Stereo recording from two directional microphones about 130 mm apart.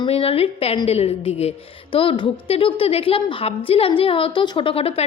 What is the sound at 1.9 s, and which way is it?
A woman's voice, 40° left (ahead or behind).